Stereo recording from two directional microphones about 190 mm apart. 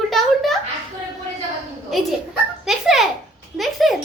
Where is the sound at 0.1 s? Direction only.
Centre (ahead or behind).